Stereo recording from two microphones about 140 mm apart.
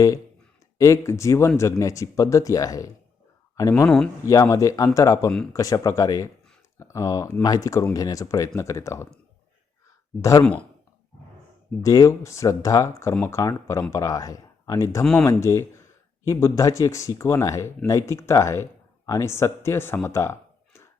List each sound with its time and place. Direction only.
0.8 s speech: 20° left (ahead or behind)
3.8 s speech: 5° left (ahead or behind)
4.3 s speech: 25° left (ahead or behind)
10.2 s speech: 20° left (ahead or behind)
11.8 s speech: 25° left (ahead or behind)